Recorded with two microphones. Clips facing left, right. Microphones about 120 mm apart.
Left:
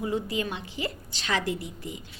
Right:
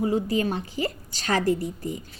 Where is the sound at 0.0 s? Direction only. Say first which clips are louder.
Right 5 dB; 40° right (ahead or behind).